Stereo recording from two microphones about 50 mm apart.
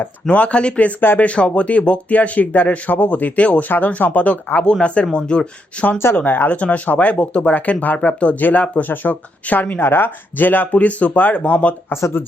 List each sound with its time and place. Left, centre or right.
0.3 s speech: left
4.6 s speech: left
6.1 s speech: left
6.5 s speech: left
9.8 s speech: left
10.7 s speech: left